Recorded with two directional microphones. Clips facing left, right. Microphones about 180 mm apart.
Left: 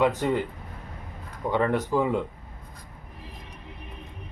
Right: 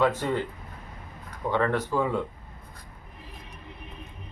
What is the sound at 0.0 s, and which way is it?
Speech, 15° left (ahead or behind).